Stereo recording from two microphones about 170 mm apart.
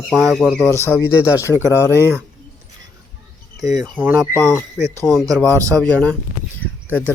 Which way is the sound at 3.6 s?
20° right (ahead or behind).